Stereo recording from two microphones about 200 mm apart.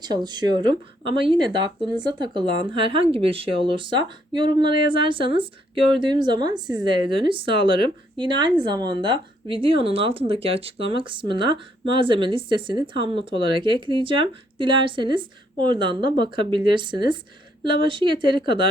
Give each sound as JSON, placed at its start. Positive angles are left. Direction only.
{"t": 0.0, "sound": "speech", "side_deg": -20}